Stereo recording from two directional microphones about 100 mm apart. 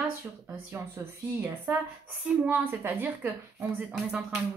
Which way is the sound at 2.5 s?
20° right (ahead or behind).